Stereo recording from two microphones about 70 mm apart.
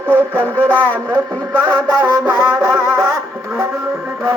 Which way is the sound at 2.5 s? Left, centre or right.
Right.